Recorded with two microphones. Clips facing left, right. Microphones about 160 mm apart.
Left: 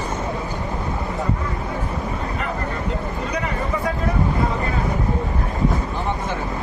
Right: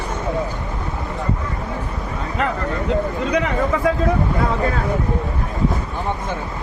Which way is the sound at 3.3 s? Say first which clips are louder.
Right 5 dB; 90° right.